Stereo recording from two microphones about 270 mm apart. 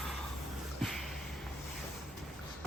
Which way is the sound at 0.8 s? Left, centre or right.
Centre.